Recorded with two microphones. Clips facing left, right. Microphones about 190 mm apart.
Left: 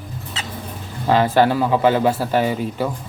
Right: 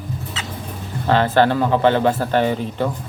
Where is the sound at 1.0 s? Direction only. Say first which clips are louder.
Even; 10° left (ahead or behind).